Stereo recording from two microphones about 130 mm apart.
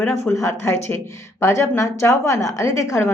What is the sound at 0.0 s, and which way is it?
A woman's voice, 20° left (ahead or behind).